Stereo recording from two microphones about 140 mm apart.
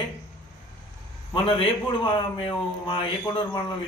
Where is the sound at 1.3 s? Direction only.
35° left (ahead or behind).